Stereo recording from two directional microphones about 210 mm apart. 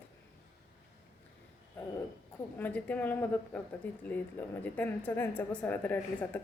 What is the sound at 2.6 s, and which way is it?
Speech, 5° left (ahead or behind).